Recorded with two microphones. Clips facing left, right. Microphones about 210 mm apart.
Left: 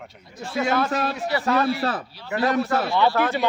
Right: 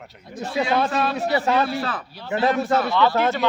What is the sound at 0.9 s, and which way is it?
Speech, 45° left (ahead or behind).